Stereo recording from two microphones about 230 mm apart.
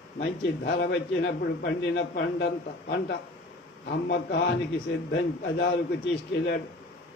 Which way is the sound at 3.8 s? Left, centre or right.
Left.